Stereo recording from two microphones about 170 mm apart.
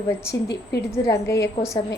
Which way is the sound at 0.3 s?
75° left (ahead or behind).